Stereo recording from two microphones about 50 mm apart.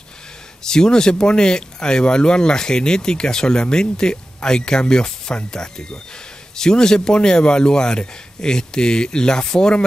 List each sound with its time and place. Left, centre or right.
0.7 s speech: centre